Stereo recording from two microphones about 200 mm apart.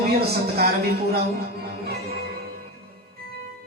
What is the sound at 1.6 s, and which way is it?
Music, 50° right (ahead or behind).